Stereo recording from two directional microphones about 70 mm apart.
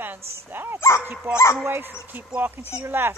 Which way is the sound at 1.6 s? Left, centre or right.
Right.